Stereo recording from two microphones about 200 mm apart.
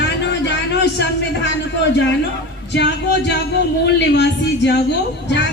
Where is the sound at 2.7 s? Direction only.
60° left (ahead or behind).